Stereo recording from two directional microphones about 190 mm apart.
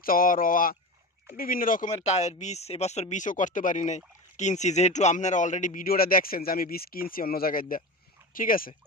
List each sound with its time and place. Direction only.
0.0 s speech: 50° left (ahead or behind)